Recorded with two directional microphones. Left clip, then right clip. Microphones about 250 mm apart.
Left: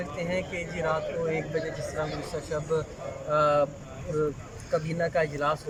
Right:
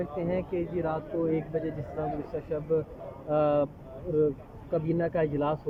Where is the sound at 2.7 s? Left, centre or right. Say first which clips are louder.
Right 2 dB; centre.